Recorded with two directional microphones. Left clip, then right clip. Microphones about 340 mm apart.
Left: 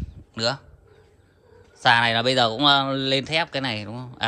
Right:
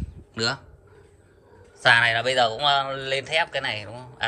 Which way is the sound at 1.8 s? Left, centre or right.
Centre.